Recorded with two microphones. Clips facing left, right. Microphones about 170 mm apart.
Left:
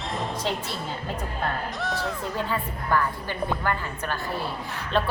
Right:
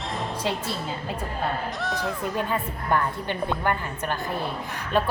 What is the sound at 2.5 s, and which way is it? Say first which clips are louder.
A woman's voice: right 1 dB; 20° right (ahead or behind).